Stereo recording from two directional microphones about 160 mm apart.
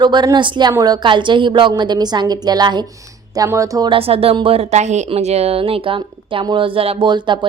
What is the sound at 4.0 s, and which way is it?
A woman's voice, 35° right (ahead or behind).